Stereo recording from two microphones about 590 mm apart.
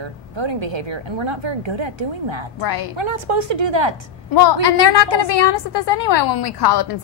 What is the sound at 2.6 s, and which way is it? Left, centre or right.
Speech, left.